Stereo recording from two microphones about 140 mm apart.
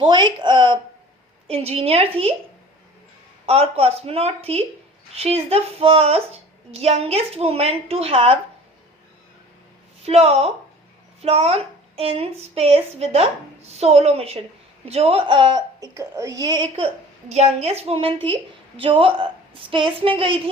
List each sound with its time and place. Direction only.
0.0 s a woman's voice: 35° right (ahead or behind)
1.5 s a woman's voice: 45° right (ahead or behind)
3.4 s a woman's voice: 45° right (ahead or behind)
10.0 s a woman's voice: 45° right (ahead or behind)
17.3 s a woman's voice: 50° right (ahead or behind)